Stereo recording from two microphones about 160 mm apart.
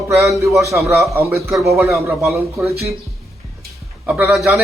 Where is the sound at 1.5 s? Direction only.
Centre (ahead or behind).